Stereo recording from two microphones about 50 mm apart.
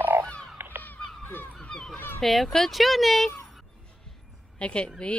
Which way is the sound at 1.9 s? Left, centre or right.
Left.